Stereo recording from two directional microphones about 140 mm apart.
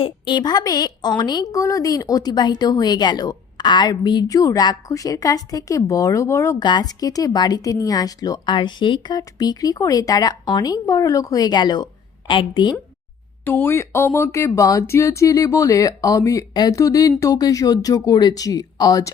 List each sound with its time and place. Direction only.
0.0 s a woman's voice: 35° left (ahead or behind)
6.6 s a woman's voice: 30° left (ahead or behind)
13.4 s a woman's voice: 15° left (ahead or behind)